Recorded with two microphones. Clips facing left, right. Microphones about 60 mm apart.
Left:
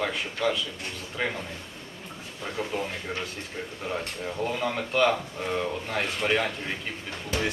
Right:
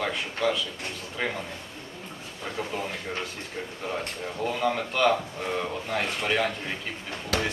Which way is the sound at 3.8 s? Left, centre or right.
Centre.